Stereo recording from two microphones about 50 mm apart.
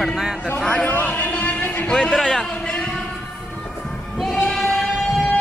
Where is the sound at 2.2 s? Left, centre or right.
Centre.